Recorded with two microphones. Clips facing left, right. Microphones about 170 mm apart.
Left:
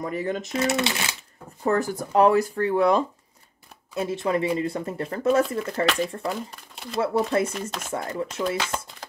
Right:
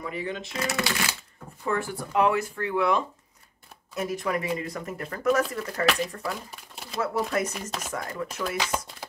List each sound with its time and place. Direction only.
0.0 s speech: 45° left (ahead or behind)
0.5 s speech: 25° left (ahead or behind)
1.6 s speech: 40° left (ahead or behind)
6.5 s shuffling cards: centre (ahead or behind)
7.0 s speech: 30° left (ahead or behind)
8.7 s shuffling cards: 10° right (ahead or behind)